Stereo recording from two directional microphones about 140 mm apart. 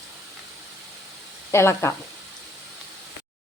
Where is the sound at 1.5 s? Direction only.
20° left (ahead or behind).